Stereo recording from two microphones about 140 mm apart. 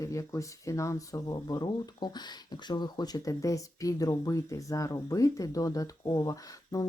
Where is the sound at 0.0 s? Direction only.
20° left (ahead or behind).